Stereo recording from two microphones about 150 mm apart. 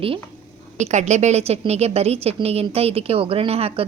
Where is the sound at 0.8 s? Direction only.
50° right (ahead or behind).